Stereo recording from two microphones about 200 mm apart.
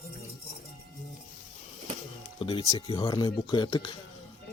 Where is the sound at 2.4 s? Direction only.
25° left (ahead or behind).